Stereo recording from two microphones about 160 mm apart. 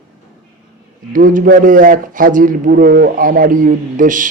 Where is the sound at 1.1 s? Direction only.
55° right (ahead or behind).